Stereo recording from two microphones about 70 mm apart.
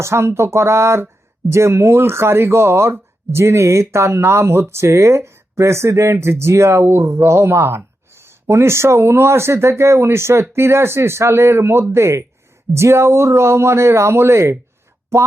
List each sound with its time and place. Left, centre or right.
0.0 s speech: right